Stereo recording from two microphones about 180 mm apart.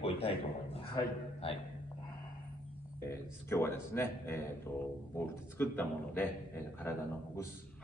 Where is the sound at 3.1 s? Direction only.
15° left (ahead or behind).